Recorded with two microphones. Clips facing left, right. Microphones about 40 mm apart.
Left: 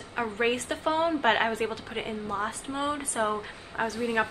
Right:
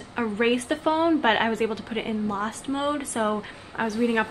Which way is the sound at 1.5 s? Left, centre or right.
Centre.